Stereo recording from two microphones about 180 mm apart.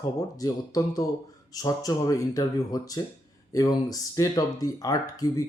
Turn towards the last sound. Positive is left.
turn(degrees=20)  # may be behind; listen again after turning